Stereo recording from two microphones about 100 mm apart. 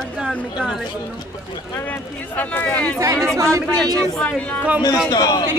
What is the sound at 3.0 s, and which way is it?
Speech, 35° right (ahead or behind).